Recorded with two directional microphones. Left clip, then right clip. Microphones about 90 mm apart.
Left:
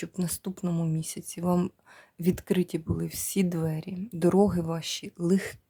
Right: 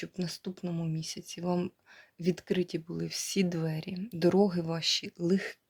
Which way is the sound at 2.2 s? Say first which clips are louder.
Left 3 dB; 75° left (ahead or behind).